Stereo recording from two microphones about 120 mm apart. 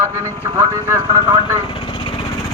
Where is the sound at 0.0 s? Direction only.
25° right (ahead or behind).